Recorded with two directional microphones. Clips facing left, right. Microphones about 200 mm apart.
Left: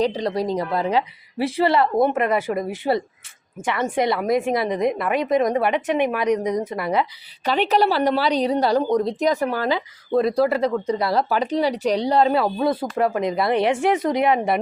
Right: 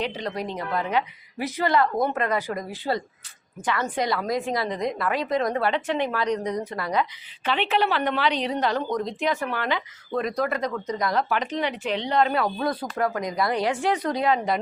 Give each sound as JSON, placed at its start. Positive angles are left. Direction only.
{"t": 0.0, "sound": "a woman's voice", "side_deg": 35}
{"t": 7.4, "sound": "a woman's voice", "side_deg": 40}